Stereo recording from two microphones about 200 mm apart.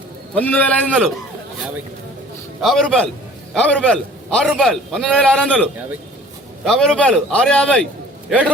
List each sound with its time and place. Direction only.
0.3 s a man's voice: 10° left (ahead or behind)
2.6 s a man's voice: centre (ahead or behind)
6.7 s a man's voice: centre (ahead or behind)